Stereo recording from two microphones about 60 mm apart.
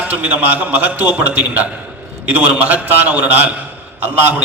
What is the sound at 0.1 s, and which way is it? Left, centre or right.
A man's voice, right.